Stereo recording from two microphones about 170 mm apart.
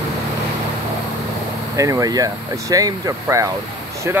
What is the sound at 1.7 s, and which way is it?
Speech, 20° right (ahead or behind).